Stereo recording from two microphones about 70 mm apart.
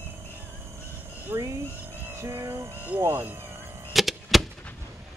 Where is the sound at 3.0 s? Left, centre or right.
Right.